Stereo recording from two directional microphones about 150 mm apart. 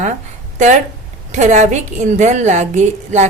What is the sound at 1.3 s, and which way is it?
A woman's voice, 50° right (ahead or behind).